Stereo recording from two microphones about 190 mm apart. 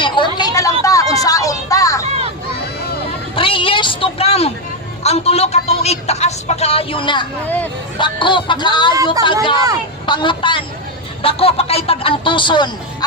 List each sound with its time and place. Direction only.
0.0 s music: 25° left (ahead or behind)
3.3 s a sound: 25° left (ahead or behind)
5.0 s speech: 35° left (ahead or behind)
7.4 s speech: 10° left (ahead or behind)
7.9 s speech: 25° left (ahead or behind)